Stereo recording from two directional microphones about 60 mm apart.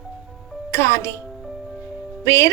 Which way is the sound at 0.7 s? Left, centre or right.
Left.